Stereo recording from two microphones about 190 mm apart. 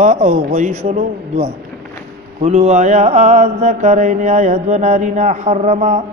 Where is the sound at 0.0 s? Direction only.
35° right (ahead or behind).